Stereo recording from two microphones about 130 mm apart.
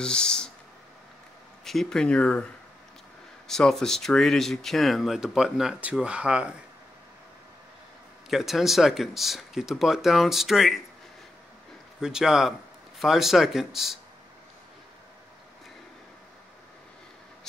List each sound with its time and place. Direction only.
0.0 s a sound: 5° left (ahead or behind)
1.6 s speech: centre (ahead or behind)
3.4 s speech: 5° left (ahead or behind)
8.3 s speech: centre (ahead or behind)
12.0 s speech: 5° right (ahead or behind)